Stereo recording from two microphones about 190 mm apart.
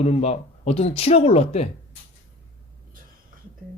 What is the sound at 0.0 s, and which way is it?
A man's voice, 35° left (ahead or behind).